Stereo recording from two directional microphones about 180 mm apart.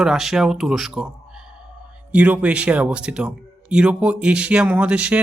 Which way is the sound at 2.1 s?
5° right (ahead or behind).